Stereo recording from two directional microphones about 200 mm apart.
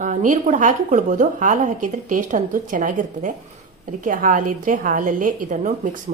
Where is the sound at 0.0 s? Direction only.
40° right (ahead or behind).